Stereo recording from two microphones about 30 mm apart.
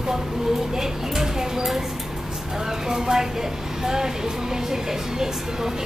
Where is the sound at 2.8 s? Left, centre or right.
Centre.